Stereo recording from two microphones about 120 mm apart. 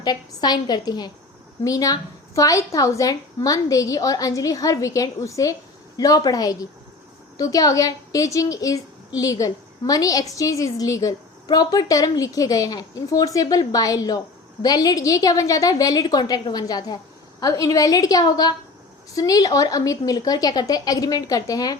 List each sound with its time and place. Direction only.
0.0 s a woman's voice: 35° left (ahead or behind)